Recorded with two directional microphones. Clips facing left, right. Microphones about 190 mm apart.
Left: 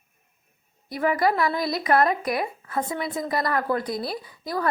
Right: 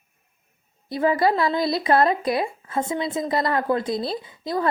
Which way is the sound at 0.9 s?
25° right (ahead or behind).